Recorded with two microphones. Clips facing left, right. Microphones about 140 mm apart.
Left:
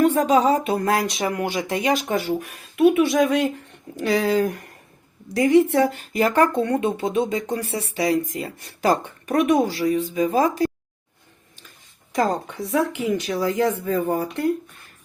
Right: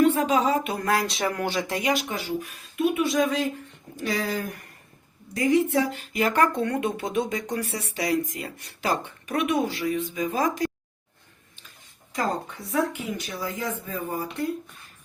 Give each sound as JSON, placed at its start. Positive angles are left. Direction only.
{"t": 0.0, "sound": "speech", "side_deg": 40}
{"t": 1.8, "sound": "speech", "side_deg": 40}
{"t": 5.3, "sound": "speech", "side_deg": 65}
{"t": 12.9, "sound": "speech", "side_deg": 90}